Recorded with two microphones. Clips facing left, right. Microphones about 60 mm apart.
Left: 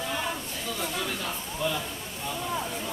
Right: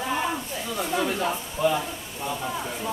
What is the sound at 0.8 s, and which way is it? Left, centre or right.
Speech, right.